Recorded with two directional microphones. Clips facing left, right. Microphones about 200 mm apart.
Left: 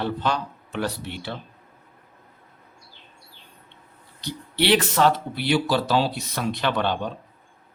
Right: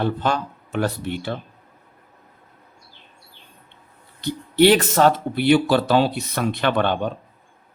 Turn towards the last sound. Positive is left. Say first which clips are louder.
# right 4 dB
turn(degrees=-55)  # may be behind; listen again after turning